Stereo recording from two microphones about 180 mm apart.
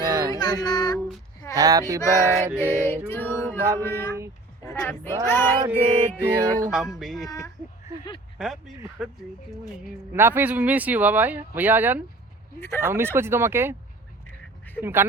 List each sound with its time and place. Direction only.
0.0 s music: 20° right (ahead or behind)
0.3 s music: 20° left (ahead or behind)
0.9 s speech: centre (ahead or behind)
1.5 s a sound: 20° right (ahead or behind)
2.0 s music: 15° left (ahead or behind)
4.6 s speech: 15° left (ahead or behind)
5.2 s music: 10° left (ahead or behind)
5.5 s speech: 15° right (ahead or behind)
7.0 s speech: centre (ahead or behind)
7.3 s music: 15° left (ahead or behind)
8.4 s speech: centre (ahead or behind)
12.5 s music: 10° left (ahead or behind)
12.8 s speech: 15° right (ahead or behind)
14.8 s speech: 10° right (ahead or behind)